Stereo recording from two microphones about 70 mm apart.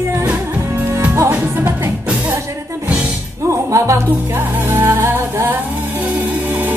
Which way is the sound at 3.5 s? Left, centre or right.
Right.